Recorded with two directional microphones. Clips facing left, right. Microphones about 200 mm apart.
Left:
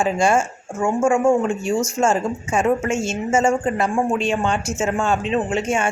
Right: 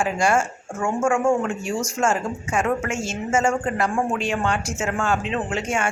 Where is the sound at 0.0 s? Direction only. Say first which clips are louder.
Left 3 dB; 20° left (ahead or behind).